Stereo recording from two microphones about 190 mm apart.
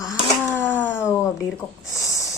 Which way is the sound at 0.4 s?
10° left (ahead or behind).